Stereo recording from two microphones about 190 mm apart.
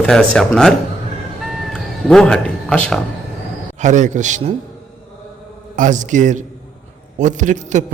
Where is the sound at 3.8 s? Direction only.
40° right (ahead or behind).